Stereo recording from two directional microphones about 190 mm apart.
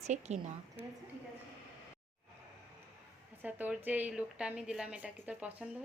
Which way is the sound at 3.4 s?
10° right (ahead or behind).